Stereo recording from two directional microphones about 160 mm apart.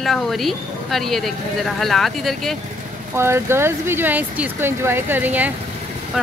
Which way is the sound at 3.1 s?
15° right (ahead or behind).